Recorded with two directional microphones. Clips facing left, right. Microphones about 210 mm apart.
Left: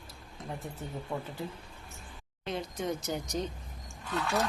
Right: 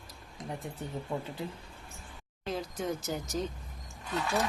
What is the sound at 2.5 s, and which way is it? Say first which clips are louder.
Speech: even; centre (ahead or behind).